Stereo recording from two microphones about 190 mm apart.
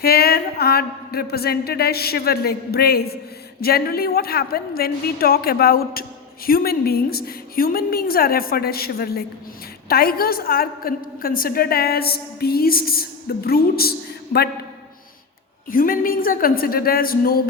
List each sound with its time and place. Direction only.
0.0 s a sound: 55° left (ahead or behind)
3.6 s a woman's voice: 55° left (ahead or behind)
15.7 s a woman's voice: 45° left (ahead or behind)